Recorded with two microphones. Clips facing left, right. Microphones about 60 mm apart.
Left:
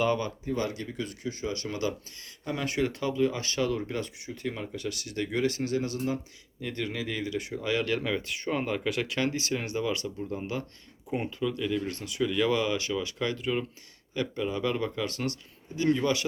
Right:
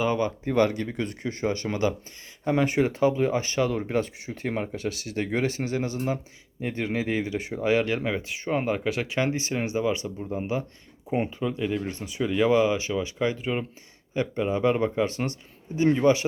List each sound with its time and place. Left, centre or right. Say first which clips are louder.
0.0 s speech: right 2 dB; centre
0.4 s speech: right 8 dB; right
4.8 s speech: right 4 dB; right